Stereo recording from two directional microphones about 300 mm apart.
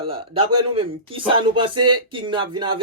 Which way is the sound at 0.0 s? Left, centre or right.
Centre.